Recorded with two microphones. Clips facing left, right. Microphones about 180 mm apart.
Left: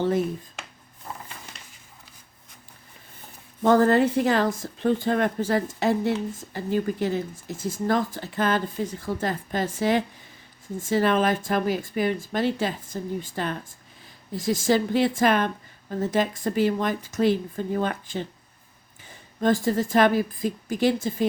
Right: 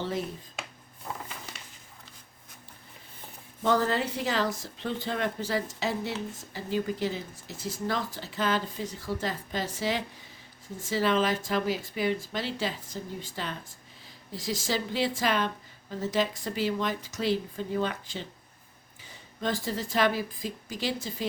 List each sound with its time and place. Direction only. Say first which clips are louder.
3.6 s a woman's voice: left 8 dB; 50° left (ahead or behind)